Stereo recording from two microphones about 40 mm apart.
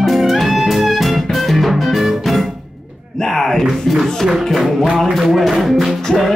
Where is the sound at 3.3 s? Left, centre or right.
Centre.